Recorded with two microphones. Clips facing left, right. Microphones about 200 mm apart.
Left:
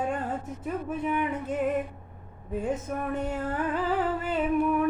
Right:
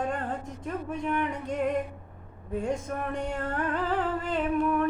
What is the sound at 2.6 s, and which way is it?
Music, 5° left (ahead or behind).